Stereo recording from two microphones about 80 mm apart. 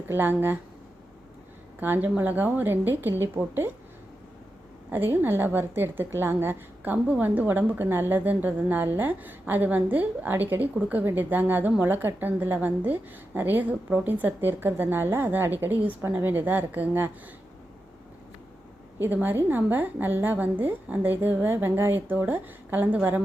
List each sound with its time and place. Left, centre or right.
0.1 s a woman's voice: right
1.8 s a woman's voice: right
4.9 s a woman's voice: right
19.0 s a woman's voice: right